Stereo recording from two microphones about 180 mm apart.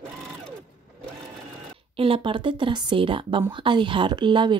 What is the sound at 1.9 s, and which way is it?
Speech, 30° right (ahead or behind).